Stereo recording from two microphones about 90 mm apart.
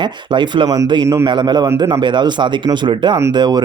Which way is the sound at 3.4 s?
50° right (ahead or behind).